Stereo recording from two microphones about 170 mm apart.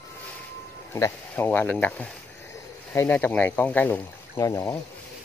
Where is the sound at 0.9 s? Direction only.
15° left (ahead or behind).